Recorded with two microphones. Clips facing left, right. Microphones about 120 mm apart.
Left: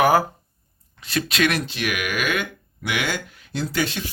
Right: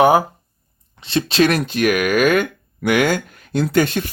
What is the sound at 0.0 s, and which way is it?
Speech, 20° right (ahead or behind).